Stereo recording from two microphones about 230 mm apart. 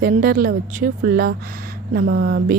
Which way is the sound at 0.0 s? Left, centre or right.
Right.